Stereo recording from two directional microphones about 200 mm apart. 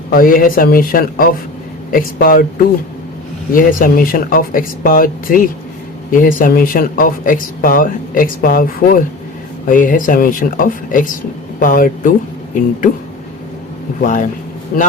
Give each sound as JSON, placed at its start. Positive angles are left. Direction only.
{"t": 0.1, "sound": "speech", "side_deg": 45}
{"t": 3.5, "sound": "speech", "side_deg": 45}
{"t": 14.0, "sound": "speech", "side_deg": 40}